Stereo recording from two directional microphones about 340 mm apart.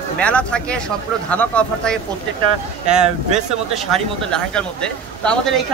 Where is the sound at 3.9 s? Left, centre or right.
Centre.